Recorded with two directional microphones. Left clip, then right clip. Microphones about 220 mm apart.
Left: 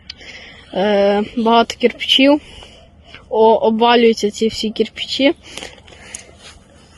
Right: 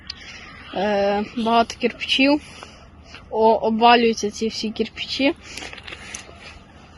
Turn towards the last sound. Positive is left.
turn(degrees=55)  # may be behind; listen again after turning